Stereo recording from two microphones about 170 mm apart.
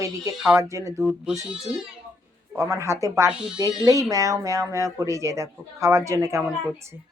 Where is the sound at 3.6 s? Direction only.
25° right (ahead or behind).